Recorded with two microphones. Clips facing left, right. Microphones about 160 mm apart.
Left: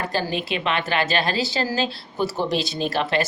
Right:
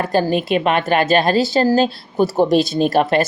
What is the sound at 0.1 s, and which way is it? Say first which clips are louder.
A woman's voice: right 9 dB; 50° right (ahead or behind).